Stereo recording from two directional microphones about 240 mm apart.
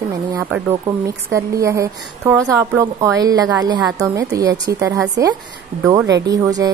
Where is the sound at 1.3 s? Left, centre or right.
Centre.